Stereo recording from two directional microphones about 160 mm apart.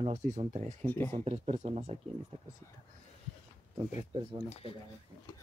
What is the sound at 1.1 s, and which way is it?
Speech, 40° right (ahead or behind).